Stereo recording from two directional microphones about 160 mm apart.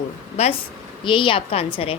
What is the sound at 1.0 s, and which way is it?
Speech, 30° left (ahead or behind).